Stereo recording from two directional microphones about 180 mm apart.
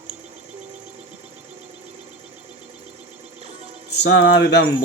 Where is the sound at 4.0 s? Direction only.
75° left (ahead or behind).